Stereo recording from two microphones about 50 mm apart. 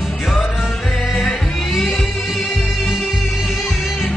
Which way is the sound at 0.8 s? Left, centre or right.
Centre.